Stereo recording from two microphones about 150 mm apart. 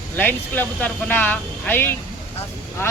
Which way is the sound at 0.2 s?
10° left (ahead or behind).